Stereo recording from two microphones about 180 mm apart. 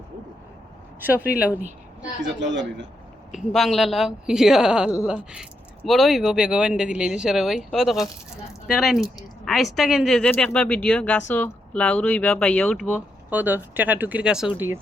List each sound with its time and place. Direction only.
2.2 s a man's voice: 90° right
3.5 s speech: centre (ahead or behind)
13.3 s speech: 10° right (ahead or behind)